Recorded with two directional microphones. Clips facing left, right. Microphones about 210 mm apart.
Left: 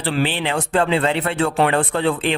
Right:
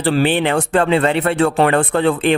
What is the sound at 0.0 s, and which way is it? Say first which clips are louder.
Speech: right 6 dB; 50° right (ahead or behind).